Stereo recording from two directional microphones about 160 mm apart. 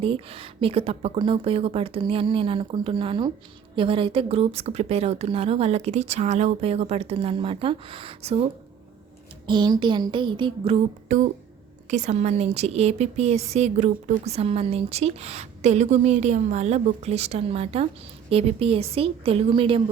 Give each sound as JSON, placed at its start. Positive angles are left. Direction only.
{"t": 0.0, "sound": "a woman's voice", "side_deg": -35}
{"t": 9.5, "sound": "a sound", "side_deg": -30}
{"t": 11.1, "sound": "a woman's voice", "side_deg": -50}